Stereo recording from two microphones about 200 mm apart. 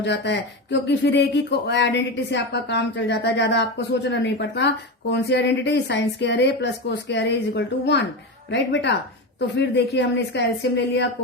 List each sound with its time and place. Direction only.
0.0 s speech: 60° left (ahead or behind)